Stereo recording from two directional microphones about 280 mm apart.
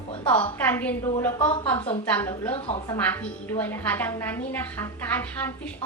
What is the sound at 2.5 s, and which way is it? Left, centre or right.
Speech, centre.